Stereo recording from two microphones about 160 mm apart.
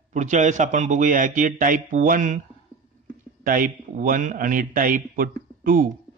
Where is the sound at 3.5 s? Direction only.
55° right (ahead or behind).